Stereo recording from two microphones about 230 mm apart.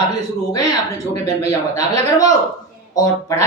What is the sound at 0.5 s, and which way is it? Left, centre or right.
Speech, centre.